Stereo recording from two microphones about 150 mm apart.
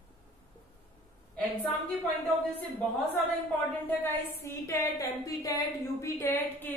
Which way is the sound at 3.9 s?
15° left (ahead or behind).